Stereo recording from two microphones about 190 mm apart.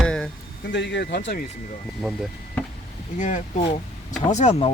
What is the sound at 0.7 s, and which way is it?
Speech, 65° left (ahead or behind).